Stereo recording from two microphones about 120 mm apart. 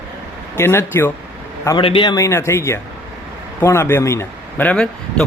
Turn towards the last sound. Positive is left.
turn(degrees=10)  # may be behind; listen again after turning